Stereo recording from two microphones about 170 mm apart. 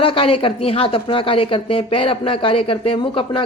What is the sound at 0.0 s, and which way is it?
Speech, 30° left (ahead or behind).